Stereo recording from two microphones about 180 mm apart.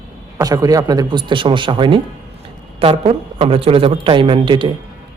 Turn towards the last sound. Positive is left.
turn(degrees=-25)  # may be behind; listen again after turning